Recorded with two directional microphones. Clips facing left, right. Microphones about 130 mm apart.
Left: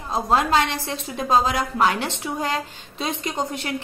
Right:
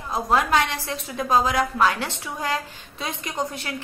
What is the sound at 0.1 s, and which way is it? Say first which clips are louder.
A woman's voice: left 1 dB; 25° left (ahead or behind).